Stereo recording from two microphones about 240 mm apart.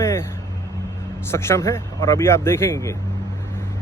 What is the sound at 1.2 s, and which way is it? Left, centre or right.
Speech, centre.